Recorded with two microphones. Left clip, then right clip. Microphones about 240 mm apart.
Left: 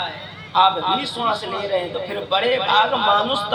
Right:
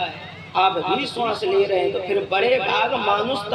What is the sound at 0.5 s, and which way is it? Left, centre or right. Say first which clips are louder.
A man's voice: left 3 dB; centre.